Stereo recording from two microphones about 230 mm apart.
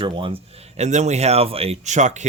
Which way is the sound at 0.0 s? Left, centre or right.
Right.